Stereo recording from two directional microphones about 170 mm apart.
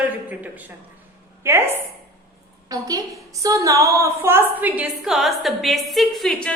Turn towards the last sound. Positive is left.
turn(degrees=5)  # may be behind; listen again after turning